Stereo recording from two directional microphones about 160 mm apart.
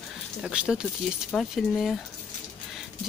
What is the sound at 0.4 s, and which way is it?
Speech, 5° right (ahead or behind).